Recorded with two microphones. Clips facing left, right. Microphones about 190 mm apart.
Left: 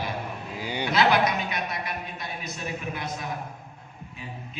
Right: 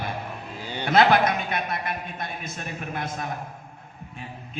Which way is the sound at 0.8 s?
50° right (ahead or behind).